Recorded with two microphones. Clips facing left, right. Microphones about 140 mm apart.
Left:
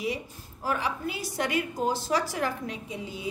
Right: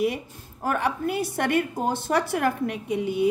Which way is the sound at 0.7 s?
55° right (ahead or behind).